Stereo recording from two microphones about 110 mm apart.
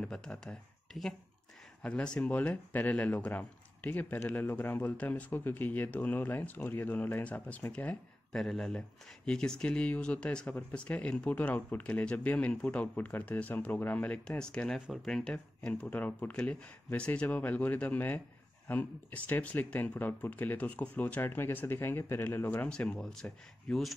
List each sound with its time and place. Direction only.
0.0 s speech: 5° left (ahead or behind)